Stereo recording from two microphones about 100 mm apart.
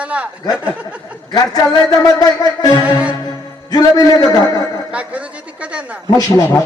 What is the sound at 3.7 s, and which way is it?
Speech, 40° left (ahead or behind).